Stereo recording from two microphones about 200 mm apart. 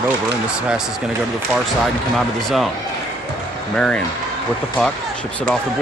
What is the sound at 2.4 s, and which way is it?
Speech, centre (ahead or behind).